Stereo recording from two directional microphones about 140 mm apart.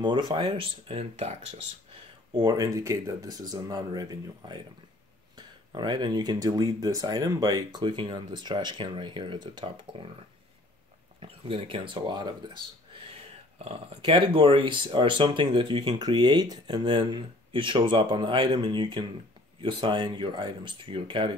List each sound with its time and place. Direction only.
0.0 s speech: 35° right (ahead or behind)
2.3 s speech: 30° right (ahead or behind)
5.8 s speech: 30° right (ahead or behind)
11.1 s speech: 40° right (ahead or behind)
13.7 s speech: 40° right (ahead or behind)